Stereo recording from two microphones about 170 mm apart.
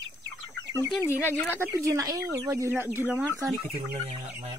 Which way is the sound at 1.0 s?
15° left (ahead or behind).